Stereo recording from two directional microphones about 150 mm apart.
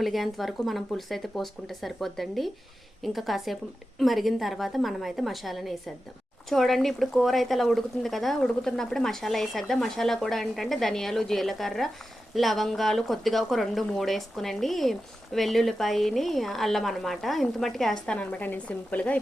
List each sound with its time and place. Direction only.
0.0 s a woman's voice: centre (ahead or behind)